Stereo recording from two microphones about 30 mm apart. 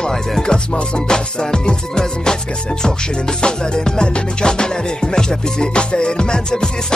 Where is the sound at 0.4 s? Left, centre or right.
Left.